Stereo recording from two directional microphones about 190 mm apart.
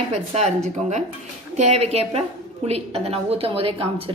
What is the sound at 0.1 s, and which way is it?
Speech, 35° right (ahead or behind).